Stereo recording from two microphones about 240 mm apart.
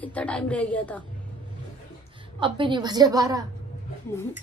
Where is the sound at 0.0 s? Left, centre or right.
Centre.